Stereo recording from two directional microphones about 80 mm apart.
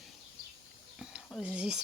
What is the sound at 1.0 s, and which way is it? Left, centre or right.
Speech, centre.